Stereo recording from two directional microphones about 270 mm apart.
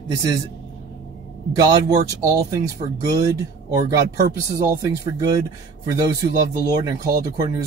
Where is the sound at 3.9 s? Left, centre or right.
Right.